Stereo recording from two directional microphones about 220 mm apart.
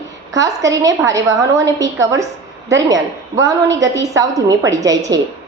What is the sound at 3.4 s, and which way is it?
A woman's voice, 15° right (ahead or behind).